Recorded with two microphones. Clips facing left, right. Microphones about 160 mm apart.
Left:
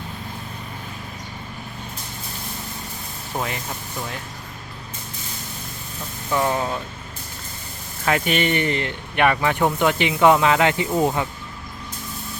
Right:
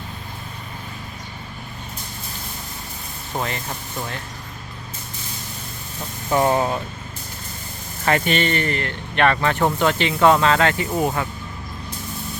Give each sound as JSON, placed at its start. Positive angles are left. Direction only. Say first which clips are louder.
{"t": 3.3, "sound": "speech", "louder": "right 1 dB", "side_deg": 5}
{"t": 6.3, "sound": "speech", "louder": "right 4 dB", "side_deg": -30}
{"t": 8.0, "sound": "speech", "louder": "right 1 dB", "side_deg": 5}